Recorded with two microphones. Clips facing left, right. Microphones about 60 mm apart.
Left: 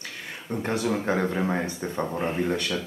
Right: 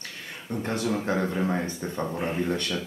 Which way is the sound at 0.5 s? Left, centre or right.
Left.